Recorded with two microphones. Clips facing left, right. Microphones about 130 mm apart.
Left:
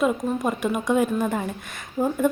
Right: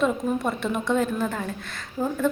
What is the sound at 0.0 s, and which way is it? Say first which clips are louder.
Speech: left 1 dB; 10° left (ahead or behind).